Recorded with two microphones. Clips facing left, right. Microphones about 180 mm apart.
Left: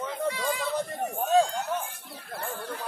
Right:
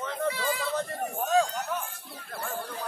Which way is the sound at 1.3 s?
25° left (ahead or behind).